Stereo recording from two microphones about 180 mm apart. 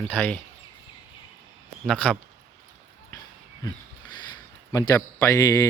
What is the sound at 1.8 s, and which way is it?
Speech, 5° left (ahead or behind).